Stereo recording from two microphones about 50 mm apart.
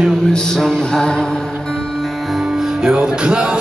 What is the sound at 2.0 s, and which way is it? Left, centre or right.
Music, centre.